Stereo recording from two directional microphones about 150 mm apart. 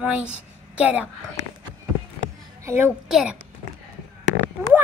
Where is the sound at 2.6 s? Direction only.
15° right (ahead or behind).